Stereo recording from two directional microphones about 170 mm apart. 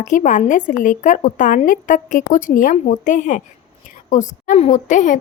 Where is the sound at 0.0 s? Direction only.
45° left (ahead or behind).